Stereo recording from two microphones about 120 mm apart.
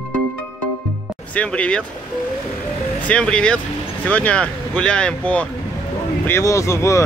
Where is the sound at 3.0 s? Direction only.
10° left (ahead or behind).